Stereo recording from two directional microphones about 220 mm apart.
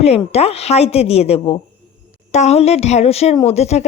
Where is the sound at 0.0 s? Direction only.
30° left (ahead or behind).